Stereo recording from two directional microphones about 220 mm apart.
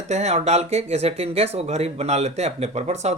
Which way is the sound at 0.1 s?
30° right (ahead or behind).